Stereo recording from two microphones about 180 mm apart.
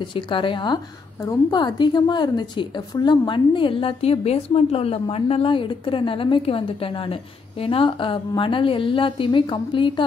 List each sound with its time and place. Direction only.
0.1 s a woman's voice: 30° left (ahead or behind)